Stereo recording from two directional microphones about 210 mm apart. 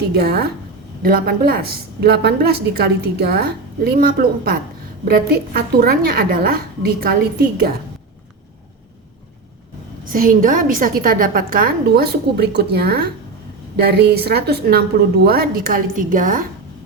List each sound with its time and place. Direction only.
0.1 s a woman's voice: 50° right (ahead or behind)
10.1 s a woman's voice: 40° right (ahead or behind)